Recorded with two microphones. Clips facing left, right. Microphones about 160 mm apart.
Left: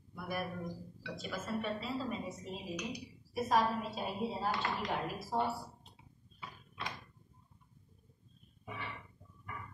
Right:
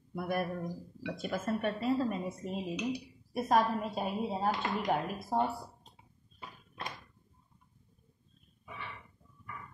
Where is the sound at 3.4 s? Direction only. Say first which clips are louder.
Right 3 dB; 50° right (ahead or behind).